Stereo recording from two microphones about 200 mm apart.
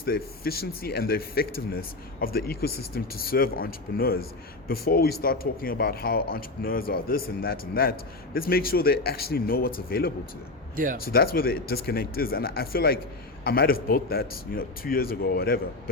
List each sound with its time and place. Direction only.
0.0 s a man's voice: 50° left (ahead or behind)